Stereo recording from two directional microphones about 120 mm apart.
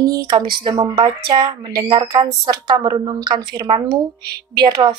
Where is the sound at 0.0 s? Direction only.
30° right (ahead or behind).